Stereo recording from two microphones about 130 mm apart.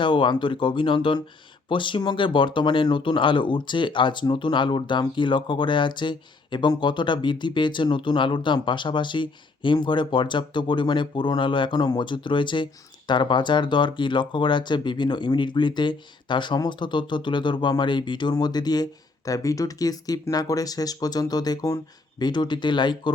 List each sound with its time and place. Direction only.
0.0 s speech: 40° left (ahead or behind)